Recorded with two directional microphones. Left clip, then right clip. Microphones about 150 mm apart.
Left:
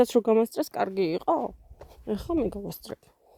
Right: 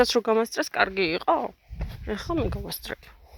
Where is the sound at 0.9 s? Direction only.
35° left (ahead or behind).